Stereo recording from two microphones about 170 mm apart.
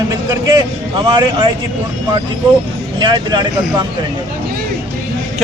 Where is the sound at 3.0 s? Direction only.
25° right (ahead or behind).